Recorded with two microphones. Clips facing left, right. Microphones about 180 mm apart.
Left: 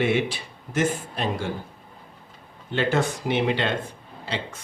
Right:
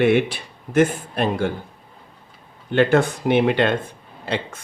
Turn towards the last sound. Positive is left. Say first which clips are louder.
# right 5 dB
turn(degrees=-55)  # may be behind; listen again after turning